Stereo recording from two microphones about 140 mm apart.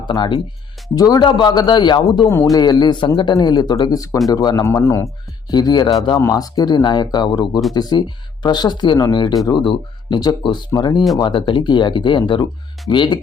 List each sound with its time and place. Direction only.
0.0 s speech: 35° left (ahead or behind)
2.3 s speech: 15° left (ahead or behind)
2.6 s speech: 30° left (ahead or behind)